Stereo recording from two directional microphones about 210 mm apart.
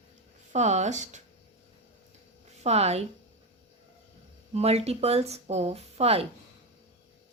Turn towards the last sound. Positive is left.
turn(degrees=-30)  # may be behind; listen again after turning